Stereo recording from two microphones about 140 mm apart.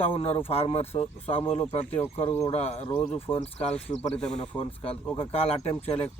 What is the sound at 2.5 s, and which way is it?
Speech, 50° left (ahead or behind).